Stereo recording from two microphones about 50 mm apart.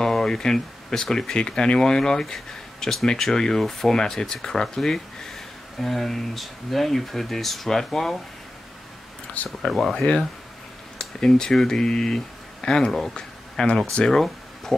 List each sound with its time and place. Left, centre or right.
0.0 s speech: centre
9.6 s speech: centre
9.9 s speech: centre
13.1 s a sound: centre
13.9 s speech: centre